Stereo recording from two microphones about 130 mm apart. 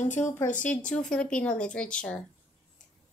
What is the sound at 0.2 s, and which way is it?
A woman's voice, 20° left (ahead or behind).